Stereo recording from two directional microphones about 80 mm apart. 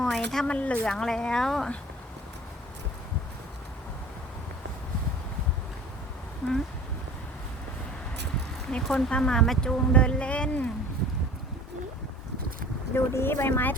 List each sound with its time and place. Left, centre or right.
0.0 s a sound: centre
0.4 s speech: centre
8.7 s speech: centre
12.9 s speech: left